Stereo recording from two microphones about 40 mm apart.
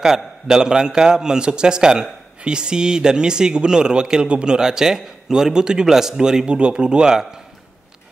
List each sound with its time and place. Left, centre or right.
0.0 s a man's voice: centre
4.6 s a man's voice: centre